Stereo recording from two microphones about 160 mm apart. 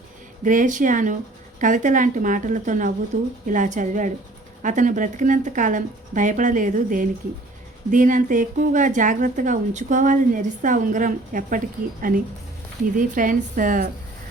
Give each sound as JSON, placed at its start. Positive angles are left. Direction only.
{"t": 0.4, "sound": "a woman's voice", "side_deg": -55}
{"t": 13.0, "sound": "a woman's voice", "side_deg": -55}